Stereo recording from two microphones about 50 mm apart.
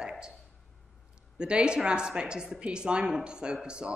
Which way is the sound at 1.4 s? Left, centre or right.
Centre.